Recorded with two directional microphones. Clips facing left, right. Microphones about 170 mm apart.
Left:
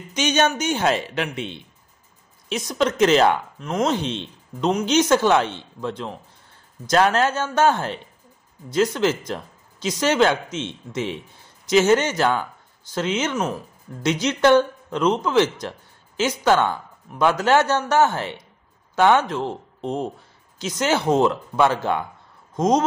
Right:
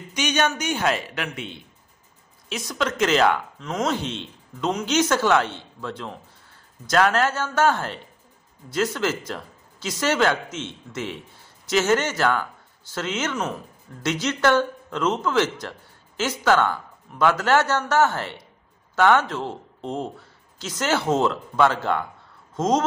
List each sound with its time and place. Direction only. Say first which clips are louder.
0.1 s speech: left 3 dB; 25° left (ahead or behind)